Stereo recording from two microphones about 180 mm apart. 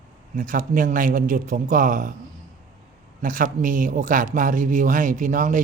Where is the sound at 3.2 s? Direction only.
50° right (ahead or behind).